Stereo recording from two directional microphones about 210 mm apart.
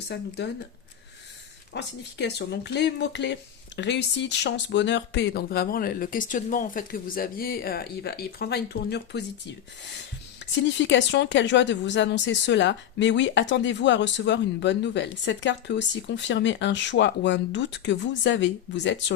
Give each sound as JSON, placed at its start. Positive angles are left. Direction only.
{"t": 0.1, "sound": "speech", "side_deg": 55}
{"t": 1.7, "sound": "speech", "side_deg": 55}
{"t": 10.4, "sound": "speech", "side_deg": 60}